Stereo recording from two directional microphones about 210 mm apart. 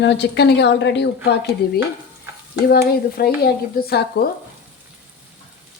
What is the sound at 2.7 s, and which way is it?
Speech, 45° left (ahead or behind).